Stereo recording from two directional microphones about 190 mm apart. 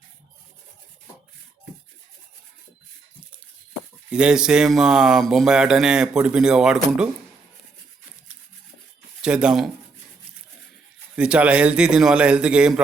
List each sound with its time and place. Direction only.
4.1 s speech: 5° right (ahead or behind)
9.2 s speech: 5° right (ahead or behind)
11.2 s speech: 5° right (ahead or behind)